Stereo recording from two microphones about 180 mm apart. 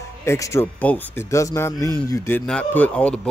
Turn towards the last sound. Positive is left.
turn(degrees=5)  # may be behind; listen again after turning